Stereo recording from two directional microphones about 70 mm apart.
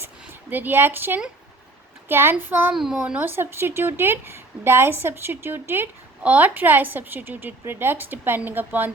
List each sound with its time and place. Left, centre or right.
0.5 s a woman's voice: right
2.7 s a child's voice: centre
3.0 s a woman's voice: right